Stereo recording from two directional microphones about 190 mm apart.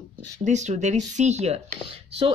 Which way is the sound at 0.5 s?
40° right (ahead or behind).